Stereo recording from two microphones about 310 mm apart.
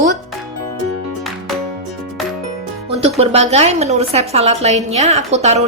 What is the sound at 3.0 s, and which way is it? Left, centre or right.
A woman's voice, centre.